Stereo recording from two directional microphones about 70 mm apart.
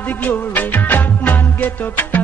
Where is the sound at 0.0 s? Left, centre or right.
Left.